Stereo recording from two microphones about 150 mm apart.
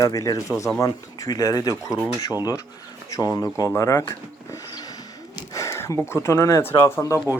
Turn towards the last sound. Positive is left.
turn(degrees=20)  # may be behind; listen again after turning